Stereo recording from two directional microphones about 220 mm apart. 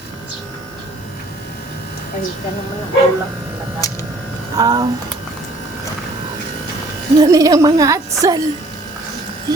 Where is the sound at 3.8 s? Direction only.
15° left (ahead or behind).